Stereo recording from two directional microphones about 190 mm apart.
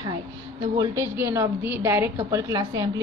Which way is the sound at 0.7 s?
15° right (ahead or behind).